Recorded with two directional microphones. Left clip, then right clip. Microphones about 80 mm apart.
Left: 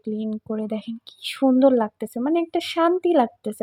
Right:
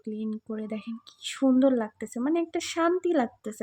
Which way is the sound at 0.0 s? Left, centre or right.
Left.